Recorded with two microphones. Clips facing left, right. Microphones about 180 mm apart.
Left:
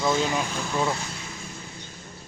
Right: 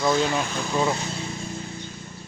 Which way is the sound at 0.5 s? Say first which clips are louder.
Right 2 dB; 10° right (ahead or behind).